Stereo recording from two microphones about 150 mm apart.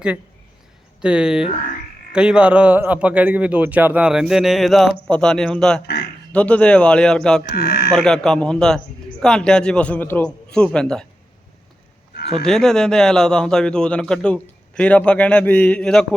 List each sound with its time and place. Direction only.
1.0 s a man's voice: 5° right (ahead or behind)
5.8 s speech: 90° left
6.3 s a man's voice: 10° left (ahead or behind)
7.5 s speech: 90° left
7.9 s a man's voice: 5° left (ahead or behind)
12.4 s a man's voice: 5° left (ahead or behind)